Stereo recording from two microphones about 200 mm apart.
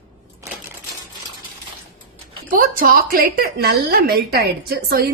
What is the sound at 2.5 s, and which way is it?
A woman's voice, 45° right (ahead or behind).